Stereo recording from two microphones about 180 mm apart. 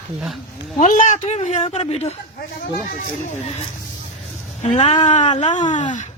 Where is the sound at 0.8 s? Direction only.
45° left (ahead or behind).